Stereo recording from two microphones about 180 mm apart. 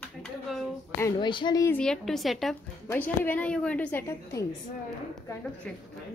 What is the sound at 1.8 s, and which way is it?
Speech, centre (ahead or behind).